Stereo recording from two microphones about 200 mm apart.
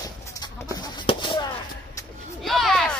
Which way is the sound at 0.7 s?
20° left (ahead or behind).